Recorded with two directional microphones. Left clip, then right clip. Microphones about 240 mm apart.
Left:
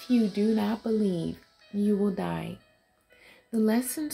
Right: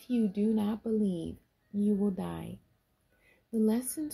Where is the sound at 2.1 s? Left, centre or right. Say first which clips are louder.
Left 7 dB; centre.